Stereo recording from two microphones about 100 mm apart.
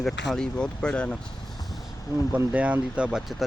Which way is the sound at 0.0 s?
5° left (ahead or behind).